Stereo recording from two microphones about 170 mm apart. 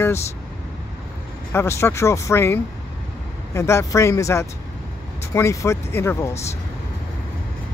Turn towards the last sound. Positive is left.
turn(degrees=15)  # may be behind; listen again after turning